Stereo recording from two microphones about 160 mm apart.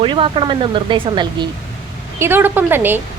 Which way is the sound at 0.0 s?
35° right (ahead or behind).